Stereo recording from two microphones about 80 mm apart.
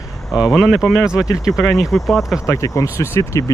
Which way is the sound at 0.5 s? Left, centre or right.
Centre.